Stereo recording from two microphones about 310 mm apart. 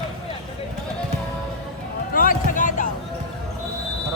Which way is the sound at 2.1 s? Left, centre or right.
Left.